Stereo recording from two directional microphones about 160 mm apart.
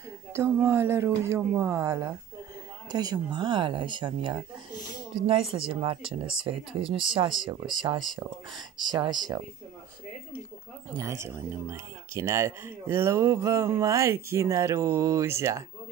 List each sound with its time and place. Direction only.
0.3 s speech: 15° right (ahead or behind); by 4.4 s 30° right (ahead or behind)
4.7 s a sound: 25° left (ahead or behind)
5.2 s speech: 35° right (ahead or behind)
11.0 s speech: 15° right (ahead or behind)